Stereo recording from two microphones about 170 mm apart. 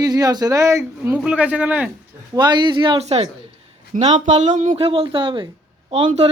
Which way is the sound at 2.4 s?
25° right (ahead or behind).